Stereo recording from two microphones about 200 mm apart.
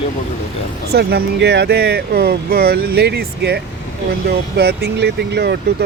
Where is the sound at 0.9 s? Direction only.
50° right (ahead or behind).